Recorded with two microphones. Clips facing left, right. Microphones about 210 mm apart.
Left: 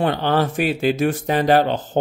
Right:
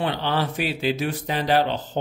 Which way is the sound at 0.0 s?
50° left (ahead or behind).